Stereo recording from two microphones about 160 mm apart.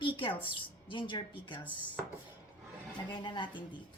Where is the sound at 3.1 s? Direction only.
30° left (ahead or behind).